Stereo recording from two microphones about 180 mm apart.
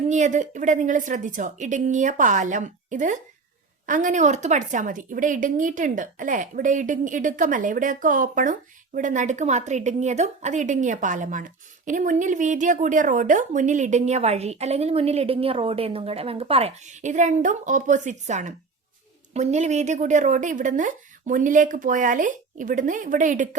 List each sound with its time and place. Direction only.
0.1 s speech: 40° right (ahead or behind)